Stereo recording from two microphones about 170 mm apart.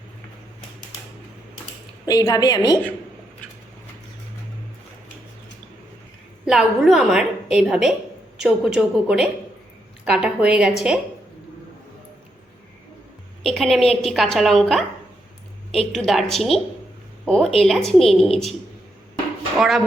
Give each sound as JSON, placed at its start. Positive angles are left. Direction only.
{"t": 2.0, "sound": "a woman's voice", "side_deg": 20}
{"t": 6.4, "sound": "a woman's voice", "side_deg": 0}
{"t": 13.4, "sound": "a woman's voice", "side_deg": 0}
{"t": 19.5, "sound": "speech", "side_deg": 0}